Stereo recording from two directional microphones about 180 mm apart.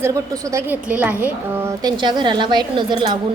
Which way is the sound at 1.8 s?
25° right (ahead or behind).